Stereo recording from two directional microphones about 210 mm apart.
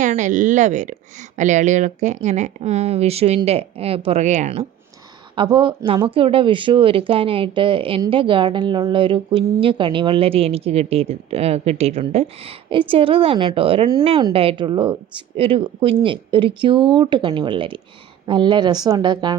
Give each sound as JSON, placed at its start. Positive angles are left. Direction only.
{"t": 0.0, "sound": "speech", "side_deg": -35}
{"t": 5.3, "sound": "speech", "side_deg": -20}